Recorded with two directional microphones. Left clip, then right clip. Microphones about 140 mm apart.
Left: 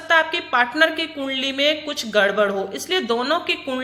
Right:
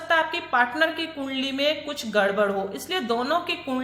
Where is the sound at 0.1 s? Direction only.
15° left (ahead or behind).